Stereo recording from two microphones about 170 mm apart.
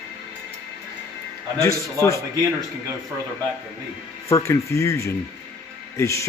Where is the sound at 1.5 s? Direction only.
20° left (ahead or behind).